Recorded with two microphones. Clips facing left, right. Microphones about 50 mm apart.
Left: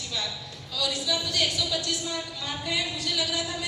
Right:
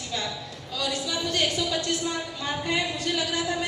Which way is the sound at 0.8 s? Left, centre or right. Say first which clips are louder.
Even; right.